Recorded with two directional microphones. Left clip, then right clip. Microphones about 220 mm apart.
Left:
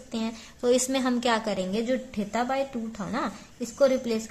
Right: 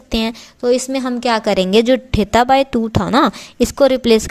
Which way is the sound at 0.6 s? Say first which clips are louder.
Right 8 dB; 25° right (ahead or behind).